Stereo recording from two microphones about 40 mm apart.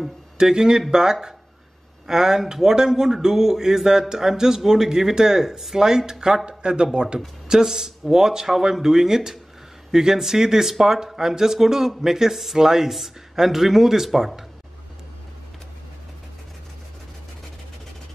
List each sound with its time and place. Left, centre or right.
0.4 s speech: centre
2.0 s speech: centre